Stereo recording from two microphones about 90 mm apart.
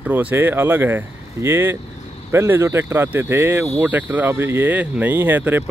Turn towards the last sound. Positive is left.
turn(degrees=-20)  # may be behind; listen again after turning